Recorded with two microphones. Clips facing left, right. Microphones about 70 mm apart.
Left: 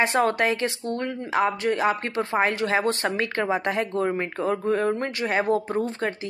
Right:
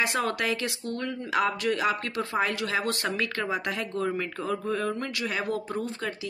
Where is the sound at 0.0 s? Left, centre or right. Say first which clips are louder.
Left 6 dB; left.